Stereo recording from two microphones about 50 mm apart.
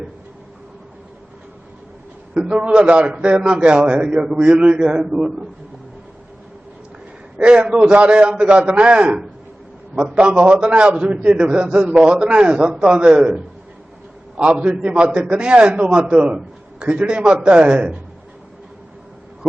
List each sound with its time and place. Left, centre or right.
2.3 s a man's voice: centre
7.3 s a man's voice: right